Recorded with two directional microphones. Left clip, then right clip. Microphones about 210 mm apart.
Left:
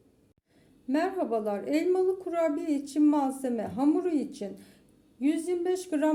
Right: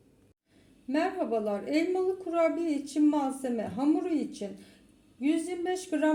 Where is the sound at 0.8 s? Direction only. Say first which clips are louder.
Left 1 dB; 10° left (ahead or behind).